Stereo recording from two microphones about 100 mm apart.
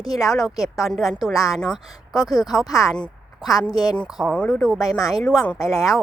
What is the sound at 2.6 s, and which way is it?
Speech, 35° left (ahead or behind).